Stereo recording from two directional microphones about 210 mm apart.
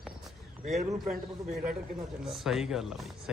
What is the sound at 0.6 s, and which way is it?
Speech, 35° right (ahead or behind).